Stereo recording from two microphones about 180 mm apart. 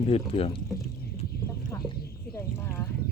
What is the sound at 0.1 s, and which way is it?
Speech, 30° left (ahead or behind).